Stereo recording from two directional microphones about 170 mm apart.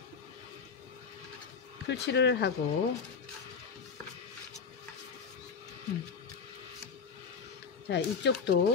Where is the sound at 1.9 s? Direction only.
90° left.